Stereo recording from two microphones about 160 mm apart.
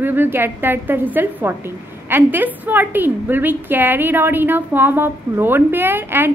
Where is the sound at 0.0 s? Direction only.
10° right (ahead or behind).